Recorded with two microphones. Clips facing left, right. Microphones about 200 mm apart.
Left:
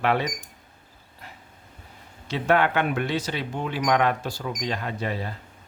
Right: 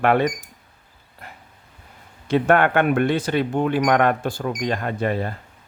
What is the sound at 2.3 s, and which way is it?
Speech, 55° right (ahead or behind).